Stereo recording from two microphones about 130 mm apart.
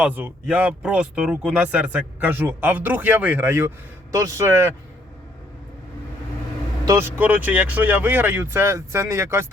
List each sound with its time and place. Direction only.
0.0 s speech: 10° right (ahead or behind)
6.8 s speech: 25° right (ahead or behind)
7.2 s speech: 10° right (ahead or behind)